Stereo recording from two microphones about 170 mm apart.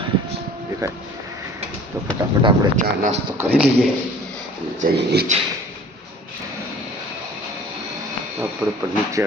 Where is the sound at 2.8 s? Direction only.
45° right (ahead or behind).